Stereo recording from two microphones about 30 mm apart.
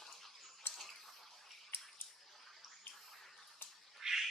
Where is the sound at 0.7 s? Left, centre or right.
Centre.